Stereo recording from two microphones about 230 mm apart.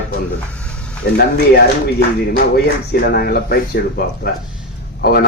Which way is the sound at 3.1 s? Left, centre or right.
Left.